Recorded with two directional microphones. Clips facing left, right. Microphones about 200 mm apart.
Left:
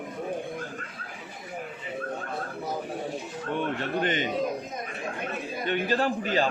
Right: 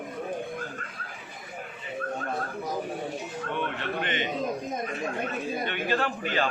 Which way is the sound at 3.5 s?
40° left (ahead or behind).